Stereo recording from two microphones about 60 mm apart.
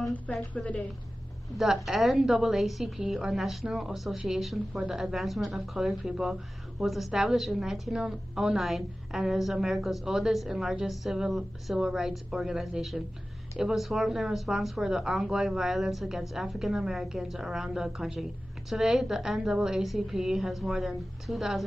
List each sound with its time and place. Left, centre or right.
0.1 s a woman's voice: left
1.9 s a woman's voice: centre